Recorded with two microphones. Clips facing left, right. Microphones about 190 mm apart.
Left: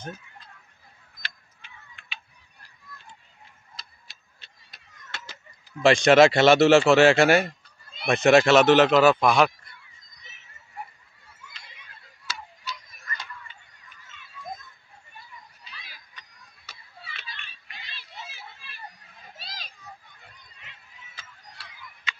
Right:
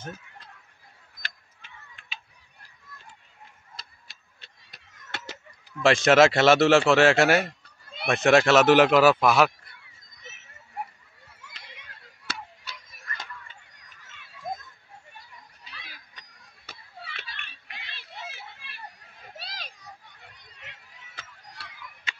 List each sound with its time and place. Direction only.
1.2 s tick-tock: 45° right (ahead or behind)
3.7 s tick-tock: 55° right (ahead or behind)
5.8 s a man's voice: centre (ahead or behind)
11.4 s a sound: 85° right
12.3 s tick-tock: 60° right (ahead or behind)
15.8 s children playing: 55° right (ahead or behind)
19.3 s children playing: 65° right (ahead or behind)
20.4 s a sound: 70° right (ahead or behind)